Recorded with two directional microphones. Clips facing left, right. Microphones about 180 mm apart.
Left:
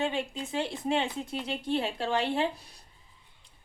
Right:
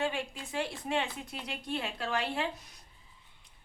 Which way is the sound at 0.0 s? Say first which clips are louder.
Left 3 dB; 25° left (ahead or behind).